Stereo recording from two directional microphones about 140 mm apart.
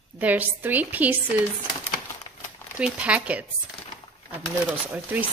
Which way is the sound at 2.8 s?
10° right (ahead or behind).